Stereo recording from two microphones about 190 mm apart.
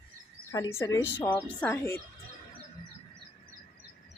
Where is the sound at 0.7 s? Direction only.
15° left (ahead or behind).